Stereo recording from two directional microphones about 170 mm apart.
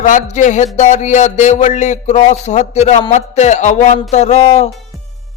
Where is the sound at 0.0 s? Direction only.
45° left (ahead or behind).